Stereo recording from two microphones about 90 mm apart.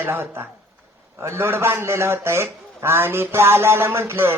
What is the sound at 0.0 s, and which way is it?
A man's voice, 25° right (ahead or behind).